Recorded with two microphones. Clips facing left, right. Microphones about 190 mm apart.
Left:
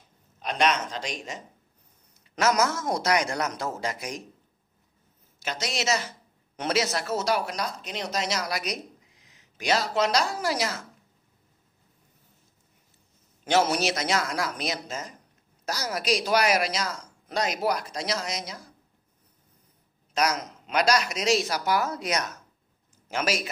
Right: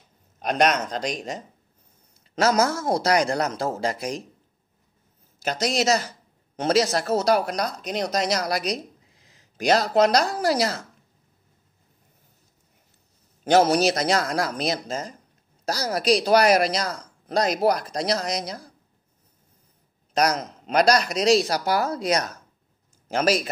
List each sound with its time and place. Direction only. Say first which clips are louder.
0.4 s a man's voice: right 4 dB; 45° right (ahead or behind)
2.4 s speech: right 3 dB; 30° right (ahead or behind)
5.4 s speech: right 7 dB; 40° right (ahead or behind)
13.4 s speech: right 6 dB; 40° right (ahead or behind)
20.2 s speech: right 4 dB; 35° right (ahead or behind)